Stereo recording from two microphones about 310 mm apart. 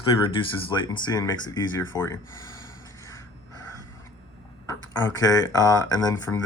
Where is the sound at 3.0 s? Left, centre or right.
Centre.